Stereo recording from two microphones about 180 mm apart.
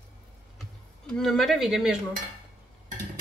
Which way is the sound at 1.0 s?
Centre (ahead or behind).